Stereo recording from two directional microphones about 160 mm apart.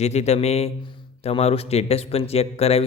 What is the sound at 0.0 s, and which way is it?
Speech, 45° left (ahead or behind).